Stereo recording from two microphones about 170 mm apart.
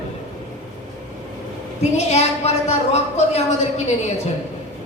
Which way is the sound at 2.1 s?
40° left (ahead or behind).